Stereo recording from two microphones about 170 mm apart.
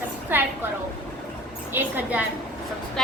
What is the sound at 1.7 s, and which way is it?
Speech, 10° right (ahead or behind).